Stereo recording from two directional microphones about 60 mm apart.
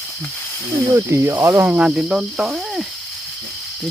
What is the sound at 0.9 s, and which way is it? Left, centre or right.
Speech, right.